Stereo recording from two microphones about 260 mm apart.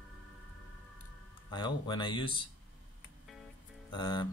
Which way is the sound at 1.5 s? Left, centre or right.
Centre.